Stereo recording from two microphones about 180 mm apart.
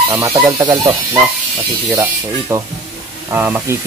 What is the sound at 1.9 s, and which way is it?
Speech, 10° right (ahead or behind).